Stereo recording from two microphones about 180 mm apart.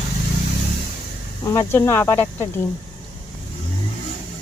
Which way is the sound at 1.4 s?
15° left (ahead or behind).